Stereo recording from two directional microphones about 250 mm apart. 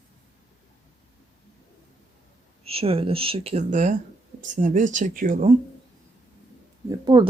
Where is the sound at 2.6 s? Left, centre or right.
Right.